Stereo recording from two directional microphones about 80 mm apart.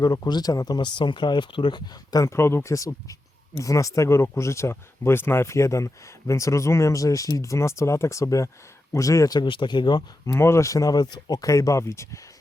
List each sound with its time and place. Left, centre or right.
0.0 s speech: left
2.2 s speech: left
9.4 s speech: left
10.2 s speech: left